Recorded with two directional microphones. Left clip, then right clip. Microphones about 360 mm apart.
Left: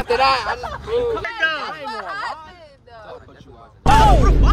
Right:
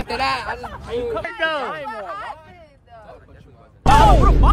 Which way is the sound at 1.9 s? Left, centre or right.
Left.